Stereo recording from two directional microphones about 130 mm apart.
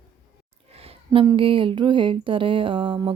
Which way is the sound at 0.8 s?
45° right (ahead or behind).